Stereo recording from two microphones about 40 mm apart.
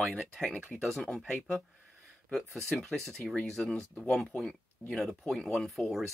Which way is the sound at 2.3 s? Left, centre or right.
Centre.